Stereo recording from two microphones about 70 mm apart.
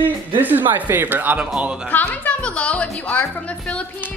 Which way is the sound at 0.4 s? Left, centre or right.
Right.